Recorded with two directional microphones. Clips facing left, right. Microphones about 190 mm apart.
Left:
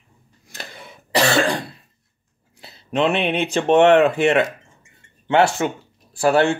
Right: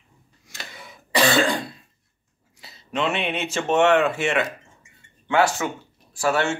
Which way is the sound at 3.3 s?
35° left (ahead or behind).